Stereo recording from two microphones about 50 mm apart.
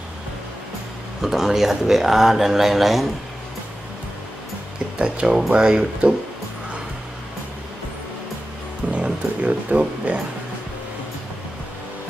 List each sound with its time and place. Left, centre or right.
1.2 s speech: centre
4.9 s speech: right
8.9 s a sound: right